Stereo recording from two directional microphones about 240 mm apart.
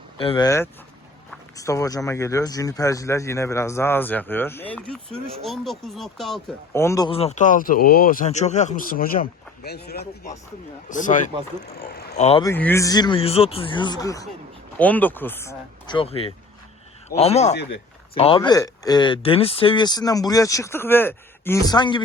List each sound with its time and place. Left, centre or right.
0.2 s speech: centre
12.4 s speech: centre; by 17.5 s left
17.6 s a sound: left
18.2 s speech: left